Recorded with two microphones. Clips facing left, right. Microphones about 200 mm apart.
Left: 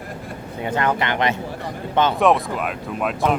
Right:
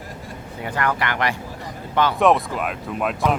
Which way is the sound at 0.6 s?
20° left (ahead or behind).